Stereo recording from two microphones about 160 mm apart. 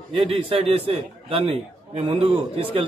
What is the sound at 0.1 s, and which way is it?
A man's voice, 35° right (ahead or behind).